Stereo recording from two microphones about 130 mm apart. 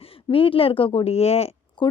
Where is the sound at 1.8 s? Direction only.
40° left (ahead or behind).